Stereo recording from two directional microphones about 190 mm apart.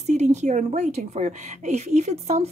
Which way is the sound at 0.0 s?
35° right (ahead or behind).